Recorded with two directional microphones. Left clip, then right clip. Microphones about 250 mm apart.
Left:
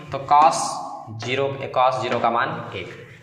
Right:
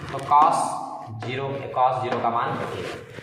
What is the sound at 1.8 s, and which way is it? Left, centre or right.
Speech, left.